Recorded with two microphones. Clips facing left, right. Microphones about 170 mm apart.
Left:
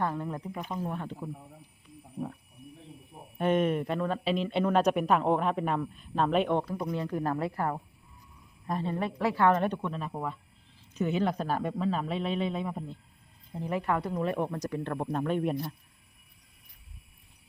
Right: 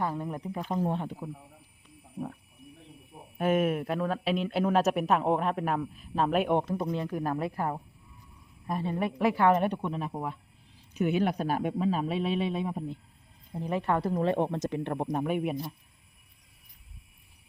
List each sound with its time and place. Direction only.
0.0 s speech: 15° right (ahead or behind)
0.7 s speech: 35° right (ahead or behind)
1.2 s speech: centre (ahead or behind)
3.3 s speech: 5° right (ahead or behind)
6.6 s speech: 20° right (ahead or behind)